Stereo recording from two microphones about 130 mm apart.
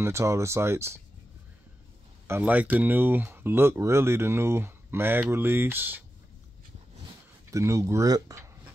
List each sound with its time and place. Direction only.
0.0 s speech: 20° right (ahead or behind)
2.2 s speech: 15° right (ahead or behind)
7.5 s speech: 25° right (ahead or behind)